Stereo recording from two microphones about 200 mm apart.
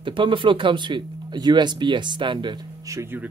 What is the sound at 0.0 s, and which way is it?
Speech, 25° right (ahead or behind).